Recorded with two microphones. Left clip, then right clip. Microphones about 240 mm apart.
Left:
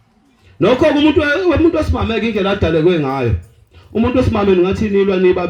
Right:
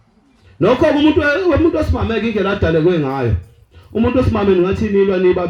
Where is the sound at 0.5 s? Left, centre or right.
Left.